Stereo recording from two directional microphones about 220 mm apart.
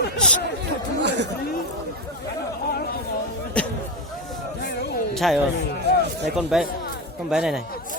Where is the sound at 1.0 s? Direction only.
50° right (ahead or behind).